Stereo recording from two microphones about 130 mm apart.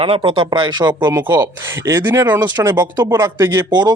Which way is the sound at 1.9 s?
20° right (ahead or behind).